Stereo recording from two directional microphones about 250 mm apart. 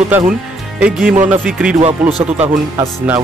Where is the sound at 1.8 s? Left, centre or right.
Right.